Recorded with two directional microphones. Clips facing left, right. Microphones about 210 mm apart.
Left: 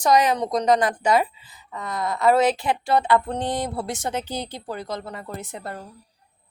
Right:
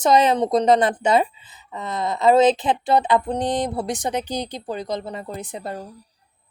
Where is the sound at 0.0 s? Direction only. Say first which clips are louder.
Right 2 dB; 25° right (ahead or behind).